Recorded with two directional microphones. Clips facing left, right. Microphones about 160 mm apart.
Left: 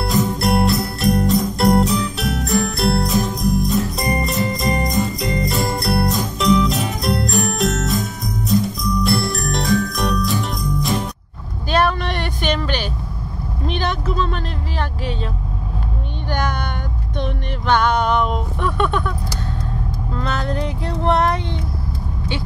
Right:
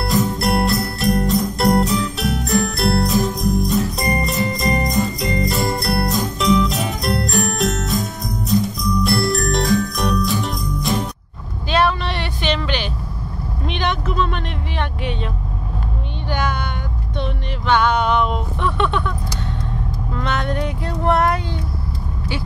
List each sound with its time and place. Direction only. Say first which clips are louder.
0.0 s jingle bell: even; centre (ahead or behind)
11.7 s vehicle: even; 45° left (ahead or behind)
16.3 s meow: even; 45° left (ahead or behind)
17.2 s a sound: left 1 dB; 50° left (ahead or behind)
18.6 s vehicle: even; 45° left (ahead or behind)
20.2 s vehicle: right 1 dB; 30° left (ahead or behind)
21.1 s a sound: even; 25° left (ahead or behind)